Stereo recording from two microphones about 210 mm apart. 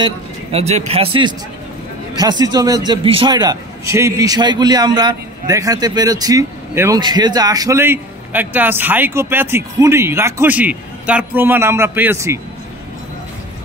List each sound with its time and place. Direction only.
0.0 s a man's voice: 30° right (ahead or behind); by 12.4 s 10° right (ahead or behind)